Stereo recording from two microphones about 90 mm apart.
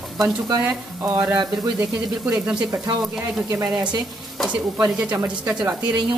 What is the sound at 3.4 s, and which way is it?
Speech, 40° right (ahead or behind).